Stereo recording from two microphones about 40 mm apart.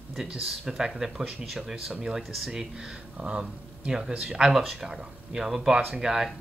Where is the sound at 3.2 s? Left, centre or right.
Right.